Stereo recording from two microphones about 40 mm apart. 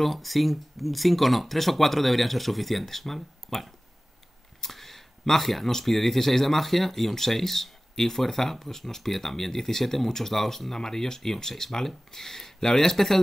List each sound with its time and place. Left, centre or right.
0.0 s speech: centre